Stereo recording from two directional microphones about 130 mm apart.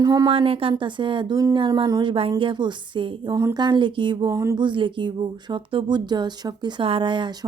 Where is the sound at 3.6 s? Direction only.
35° right (ahead or behind).